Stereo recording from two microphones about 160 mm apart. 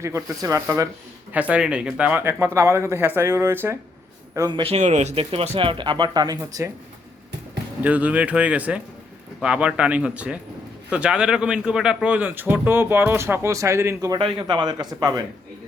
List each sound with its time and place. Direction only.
0.0 s speech: 20° right (ahead or behind)
1.3 s speech: 10° right (ahead or behind)
4.4 s speech: 25° right (ahead or behind)
7.9 s speech: 10° right (ahead or behind)